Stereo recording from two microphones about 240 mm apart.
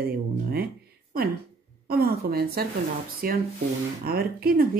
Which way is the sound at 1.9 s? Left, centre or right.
Right.